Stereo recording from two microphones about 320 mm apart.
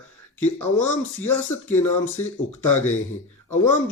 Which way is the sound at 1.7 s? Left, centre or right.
Left.